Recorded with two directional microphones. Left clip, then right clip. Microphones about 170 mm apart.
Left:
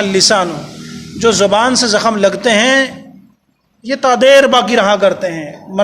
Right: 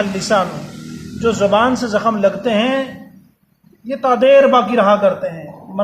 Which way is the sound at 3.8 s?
35° left (ahead or behind).